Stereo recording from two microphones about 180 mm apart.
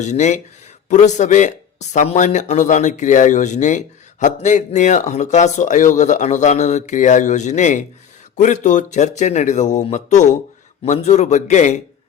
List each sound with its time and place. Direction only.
0.0 s speech: 40° left (ahead or behind)